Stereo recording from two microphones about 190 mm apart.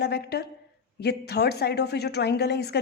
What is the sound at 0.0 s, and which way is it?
A woman's voice, 60° left (ahead or behind).